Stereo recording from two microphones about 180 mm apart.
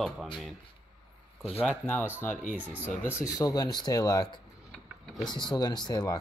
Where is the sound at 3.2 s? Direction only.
20° left (ahead or behind).